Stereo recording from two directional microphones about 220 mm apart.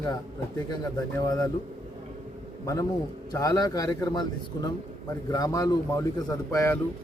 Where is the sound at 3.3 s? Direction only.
15° left (ahead or behind).